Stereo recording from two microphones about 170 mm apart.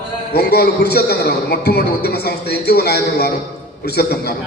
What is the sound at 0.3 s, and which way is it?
A man's voice, 65° left (ahead or behind).